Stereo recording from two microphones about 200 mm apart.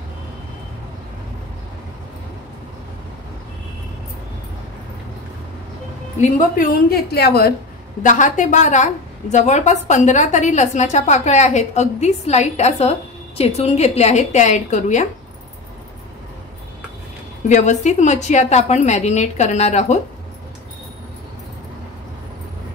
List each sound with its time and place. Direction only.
6.6 s a woman's voice: 50° left (ahead or behind)
8.0 s a woman's voice: 40° left (ahead or behind)
17.5 s a woman's voice: 35° left (ahead or behind)